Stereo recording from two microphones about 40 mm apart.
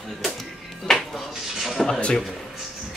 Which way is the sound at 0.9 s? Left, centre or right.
Centre.